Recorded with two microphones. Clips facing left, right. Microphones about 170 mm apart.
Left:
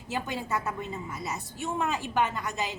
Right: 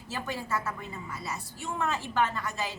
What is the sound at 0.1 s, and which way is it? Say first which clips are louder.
A woman's voice: left 2 dB; 20° left (ahead or behind).